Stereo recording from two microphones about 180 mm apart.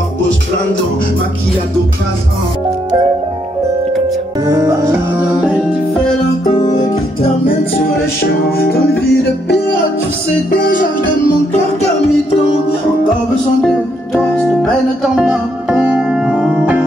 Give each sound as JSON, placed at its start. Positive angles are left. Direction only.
{"t": 4.5, "sound": "music", "side_deg": -15}
{"t": 8.2, "sound": "music", "side_deg": 60}
{"t": 14.1, "sound": "music", "side_deg": 5}